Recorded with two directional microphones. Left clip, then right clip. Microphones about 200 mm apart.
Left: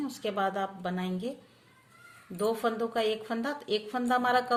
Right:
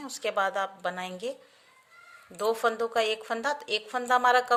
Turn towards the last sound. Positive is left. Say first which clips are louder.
# right 4 dB
turn(degrees=-35)  # may be behind; listen again after turning